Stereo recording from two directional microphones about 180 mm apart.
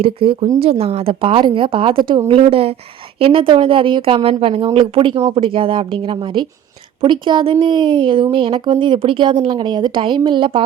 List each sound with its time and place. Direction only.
0.0 s a woman's voice: 30° right (ahead or behind)